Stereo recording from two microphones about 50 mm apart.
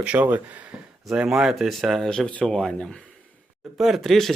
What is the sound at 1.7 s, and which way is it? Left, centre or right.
Speech, centre.